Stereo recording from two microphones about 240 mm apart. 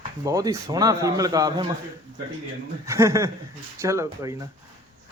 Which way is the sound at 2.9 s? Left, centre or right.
Centre.